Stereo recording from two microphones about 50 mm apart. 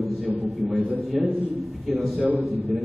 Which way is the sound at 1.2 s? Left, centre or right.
Centre.